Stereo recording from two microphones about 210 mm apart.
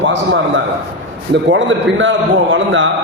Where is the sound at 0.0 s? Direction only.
60° right (ahead or behind).